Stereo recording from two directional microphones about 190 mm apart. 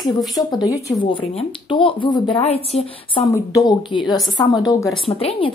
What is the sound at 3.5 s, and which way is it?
Speech, 20° left (ahead or behind).